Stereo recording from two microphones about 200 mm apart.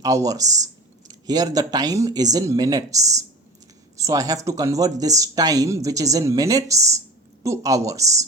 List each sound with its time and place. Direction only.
0.0 s speech: 15° right (ahead or behind)